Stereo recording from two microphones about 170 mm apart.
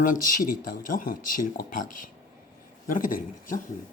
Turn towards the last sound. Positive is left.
turn(degrees=55)  # may be behind; listen again after turning